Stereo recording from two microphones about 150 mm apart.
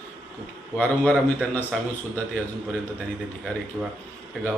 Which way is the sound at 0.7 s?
10° left (ahead or behind).